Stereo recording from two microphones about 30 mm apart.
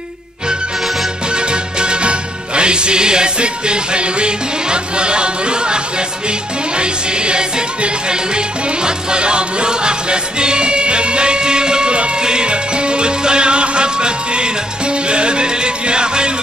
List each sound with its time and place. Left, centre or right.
1.3 s music: right